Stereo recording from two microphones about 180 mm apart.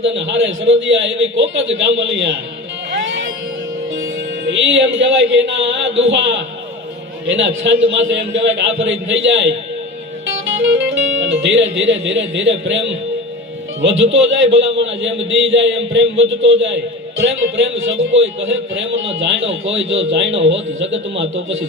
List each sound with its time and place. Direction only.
0.0 s a man's voice: 90° right
3.9 s a man's voice: 90° right
10.2 s music: 90° right
11.2 s a man's voice: 90° right